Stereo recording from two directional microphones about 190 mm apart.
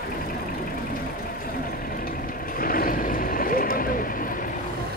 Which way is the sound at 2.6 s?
50° left (ahead or behind).